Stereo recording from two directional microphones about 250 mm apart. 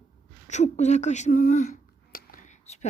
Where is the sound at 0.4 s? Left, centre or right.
Left.